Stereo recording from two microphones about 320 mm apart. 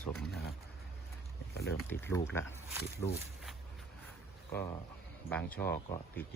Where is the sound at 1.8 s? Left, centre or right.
Centre.